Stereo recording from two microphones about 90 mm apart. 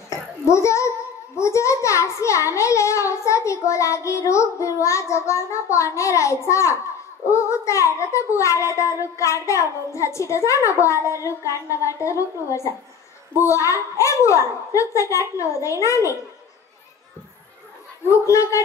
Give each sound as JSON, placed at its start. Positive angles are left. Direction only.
{"t": 0.1, "sound": "a child's voice", "side_deg": 35}
{"t": 18.0, "sound": "a child's voice", "side_deg": 35}